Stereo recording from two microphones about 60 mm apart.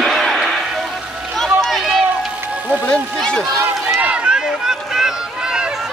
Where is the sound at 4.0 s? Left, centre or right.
Centre.